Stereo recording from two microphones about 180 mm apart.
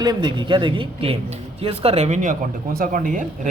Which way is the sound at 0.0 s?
25° right (ahead or behind).